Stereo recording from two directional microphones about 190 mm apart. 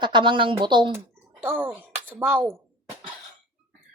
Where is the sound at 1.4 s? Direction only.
10° right (ahead or behind).